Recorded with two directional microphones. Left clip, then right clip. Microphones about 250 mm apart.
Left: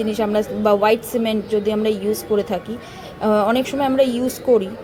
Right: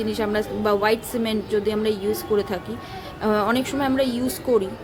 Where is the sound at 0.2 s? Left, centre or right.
Centre.